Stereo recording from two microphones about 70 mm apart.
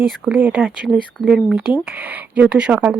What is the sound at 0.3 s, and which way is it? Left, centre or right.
Speech, right.